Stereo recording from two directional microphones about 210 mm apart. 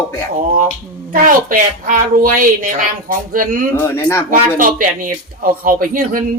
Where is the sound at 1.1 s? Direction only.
40° right (ahead or behind).